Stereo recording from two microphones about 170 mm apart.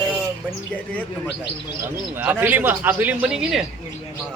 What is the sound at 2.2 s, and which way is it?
A man's voice, 10° right (ahead or behind).